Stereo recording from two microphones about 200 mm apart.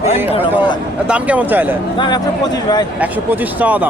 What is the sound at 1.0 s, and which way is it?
Speech, 5° right (ahead or behind).